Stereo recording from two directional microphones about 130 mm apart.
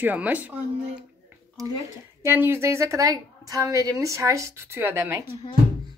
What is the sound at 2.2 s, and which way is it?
A woman's voice, 15° right (ahead or behind).